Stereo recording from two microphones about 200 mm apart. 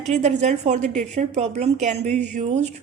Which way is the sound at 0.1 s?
35° right (ahead or behind).